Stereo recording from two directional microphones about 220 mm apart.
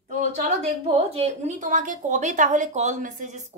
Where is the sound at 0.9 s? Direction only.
25° right (ahead or behind).